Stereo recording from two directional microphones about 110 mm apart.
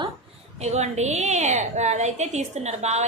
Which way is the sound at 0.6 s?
90° right.